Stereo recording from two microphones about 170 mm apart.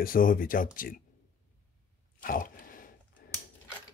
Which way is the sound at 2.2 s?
55° left (ahead or behind).